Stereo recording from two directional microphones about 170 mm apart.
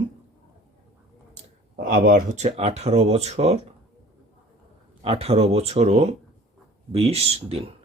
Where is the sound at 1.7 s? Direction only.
50° right (ahead or behind).